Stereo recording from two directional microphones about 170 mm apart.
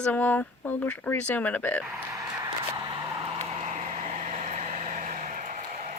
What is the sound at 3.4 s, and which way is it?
Vehicle, 40° right (ahead or behind).